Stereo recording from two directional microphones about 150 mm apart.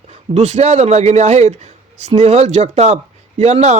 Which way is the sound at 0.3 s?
50° right (ahead or behind).